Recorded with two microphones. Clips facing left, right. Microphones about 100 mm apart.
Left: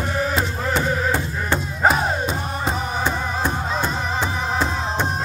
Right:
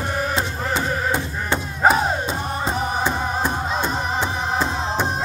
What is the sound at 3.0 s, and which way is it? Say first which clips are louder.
Music: right 1 dB; 15° right (ahead or behind).